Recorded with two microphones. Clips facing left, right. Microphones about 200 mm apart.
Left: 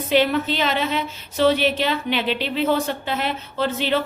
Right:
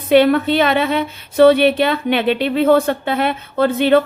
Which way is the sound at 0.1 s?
55° right (ahead or behind).